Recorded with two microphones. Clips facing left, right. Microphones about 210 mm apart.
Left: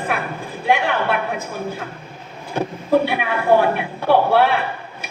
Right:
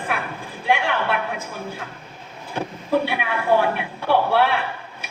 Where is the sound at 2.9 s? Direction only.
45° left (ahead or behind).